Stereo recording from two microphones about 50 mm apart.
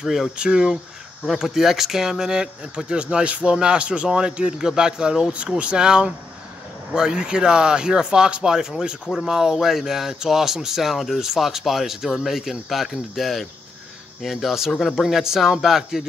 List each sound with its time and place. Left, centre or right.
0.0 s speech: centre
0.4 s speech: centre
1.2 s speech: centre